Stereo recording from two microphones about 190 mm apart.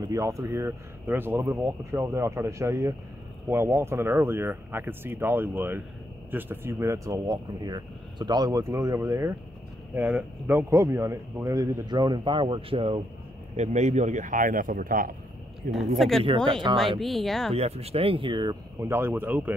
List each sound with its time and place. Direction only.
0.0 s a man's voice: 15° right (ahead or behind); by 15.1 s 45° right (ahead or behind)
15.7 s speech: centre (ahead or behind)
16.6 s speech: 20° right (ahead or behind)
17.0 s speech: centre (ahead or behind)
17.6 s speech: 35° right (ahead or behind); by 19.5 s 10° right (ahead or behind)